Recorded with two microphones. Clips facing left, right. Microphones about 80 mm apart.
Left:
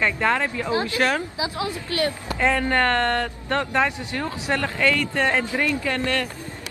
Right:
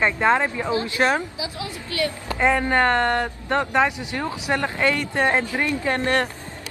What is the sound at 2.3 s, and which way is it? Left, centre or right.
Speech, centre.